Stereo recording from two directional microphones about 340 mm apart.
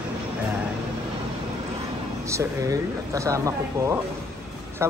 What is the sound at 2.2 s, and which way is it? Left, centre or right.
Speech, centre.